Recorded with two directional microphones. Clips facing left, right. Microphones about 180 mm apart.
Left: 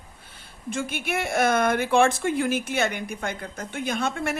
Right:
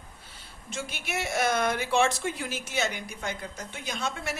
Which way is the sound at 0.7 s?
55° left (ahead or behind).